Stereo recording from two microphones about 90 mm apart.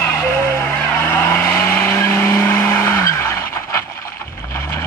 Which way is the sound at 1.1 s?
20° left (ahead or behind).